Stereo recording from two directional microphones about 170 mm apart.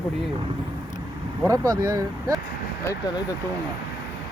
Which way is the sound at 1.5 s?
20° right (ahead or behind).